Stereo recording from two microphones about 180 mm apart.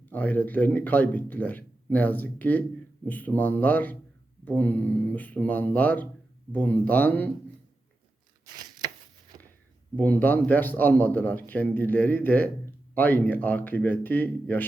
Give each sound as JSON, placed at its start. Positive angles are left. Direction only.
{"t": 0.0, "sound": "a man's voice", "side_deg": 10}
{"t": 9.3, "sound": "a sound", "side_deg": -25}
{"t": 9.9, "sound": "a man's voice", "side_deg": 10}